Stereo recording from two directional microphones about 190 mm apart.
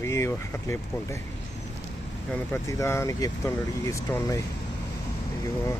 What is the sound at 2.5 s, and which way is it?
Speech, 15° left (ahead or behind).